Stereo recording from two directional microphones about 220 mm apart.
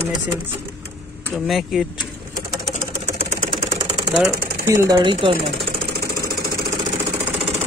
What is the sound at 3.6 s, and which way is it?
Engine, 20° right (ahead or behind).